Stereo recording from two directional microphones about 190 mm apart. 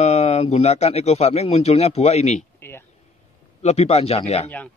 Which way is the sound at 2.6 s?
10° left (ahead or behind).